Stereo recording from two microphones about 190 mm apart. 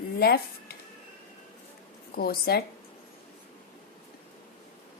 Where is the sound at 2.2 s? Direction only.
55° left (ahead or behind).